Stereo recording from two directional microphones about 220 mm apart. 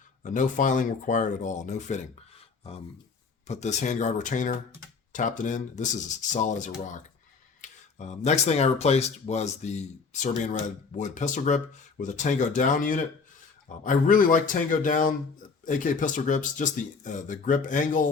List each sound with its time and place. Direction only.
0.2 s speech: 35° left (ahead or behind)
3.4 s speech: 30° left (ahead or behind)